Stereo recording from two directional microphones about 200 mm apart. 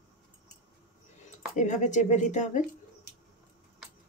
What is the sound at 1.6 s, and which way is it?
Speech, 35° left (ahead or behind).